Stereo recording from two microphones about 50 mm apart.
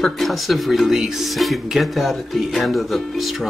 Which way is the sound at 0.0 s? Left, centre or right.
Centre.